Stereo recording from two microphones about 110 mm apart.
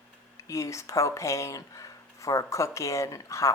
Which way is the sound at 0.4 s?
30° left (ahead or behind).